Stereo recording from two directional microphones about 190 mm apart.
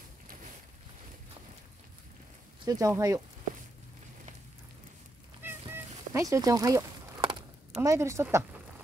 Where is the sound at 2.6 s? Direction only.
20° right (ahead or behind).